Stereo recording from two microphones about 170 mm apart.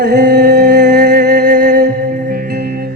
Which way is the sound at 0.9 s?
50° right (ahead or behind).